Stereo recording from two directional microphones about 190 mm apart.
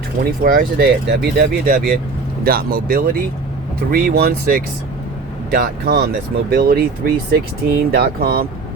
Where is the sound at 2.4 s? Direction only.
50° right (ahead or behind).